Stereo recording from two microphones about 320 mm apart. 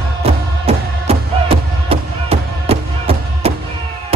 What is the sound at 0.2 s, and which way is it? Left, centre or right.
Music, centre.